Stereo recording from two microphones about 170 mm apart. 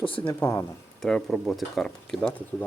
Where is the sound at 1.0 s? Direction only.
Centre (ahead or behind).